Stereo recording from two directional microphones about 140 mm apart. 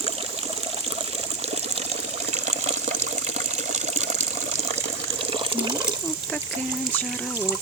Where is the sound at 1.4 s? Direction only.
50° right (ahead or behind).